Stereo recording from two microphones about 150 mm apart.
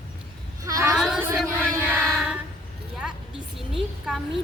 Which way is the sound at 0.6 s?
20° right (ahead or behind).